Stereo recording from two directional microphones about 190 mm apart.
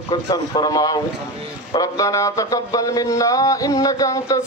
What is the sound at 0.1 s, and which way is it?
Speech, 20° left (ahead or behind).